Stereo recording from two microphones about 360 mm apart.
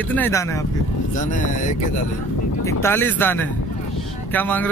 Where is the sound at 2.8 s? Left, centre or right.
Centre.